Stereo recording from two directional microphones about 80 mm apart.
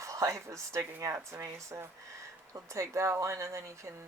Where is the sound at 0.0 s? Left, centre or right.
Right.